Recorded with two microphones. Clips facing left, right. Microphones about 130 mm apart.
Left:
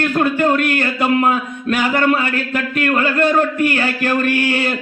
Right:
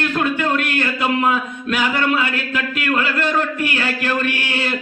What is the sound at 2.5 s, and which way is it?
A man's voice, 45° left (ahead or behind).